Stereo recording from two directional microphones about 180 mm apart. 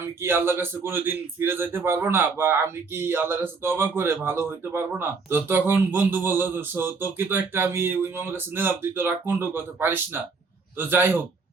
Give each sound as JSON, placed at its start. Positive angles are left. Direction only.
{"t": 0.2, "sound": "speech", "side_deg": -15}